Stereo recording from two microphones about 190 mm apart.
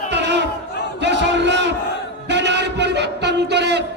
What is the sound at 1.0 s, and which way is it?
Battle cry, 65° right (ahead or behind).